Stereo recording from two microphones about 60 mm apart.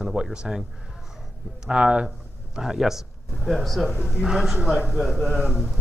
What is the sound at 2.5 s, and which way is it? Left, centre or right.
Speech, centre.